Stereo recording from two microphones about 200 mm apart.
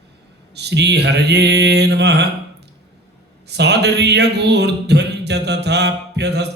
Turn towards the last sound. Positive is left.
turn(degrees=-55)  # may be behind; listen again after turning